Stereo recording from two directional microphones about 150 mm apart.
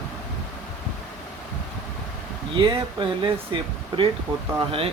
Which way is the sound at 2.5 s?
30° right (ahead or behind).